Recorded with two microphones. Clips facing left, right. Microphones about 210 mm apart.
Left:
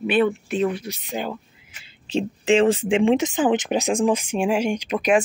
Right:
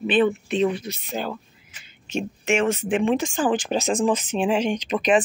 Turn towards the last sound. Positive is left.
turn(degrees=10)  # may be behind; listen again after turning